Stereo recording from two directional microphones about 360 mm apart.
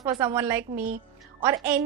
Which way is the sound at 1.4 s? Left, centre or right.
Centre.